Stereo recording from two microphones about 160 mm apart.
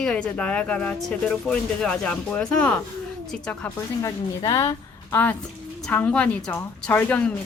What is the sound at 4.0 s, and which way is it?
A woman's voice, 20° left (ahead or behind).